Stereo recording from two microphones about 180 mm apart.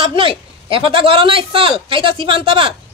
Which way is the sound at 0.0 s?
30° right (ahead or behind).